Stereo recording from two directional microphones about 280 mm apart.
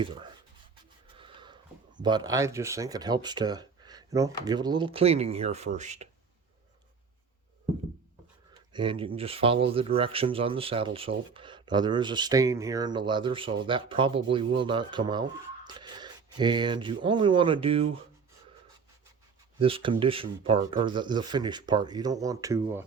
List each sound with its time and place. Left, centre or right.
0.0 s speech: centre
1.2 s a sound: centre
2.0 s speech: centre
8.5 s speech: centre
19.5 s speech: centre